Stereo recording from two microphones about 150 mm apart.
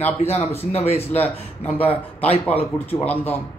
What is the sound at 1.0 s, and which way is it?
Speech, 10° left (ahead or behind).